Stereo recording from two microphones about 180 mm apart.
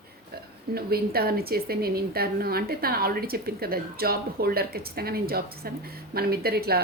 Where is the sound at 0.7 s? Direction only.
60° right (ahead or behind).